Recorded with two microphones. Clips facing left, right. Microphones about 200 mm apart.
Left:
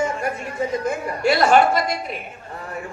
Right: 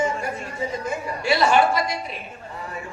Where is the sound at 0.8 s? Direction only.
50° left (ahead or behind).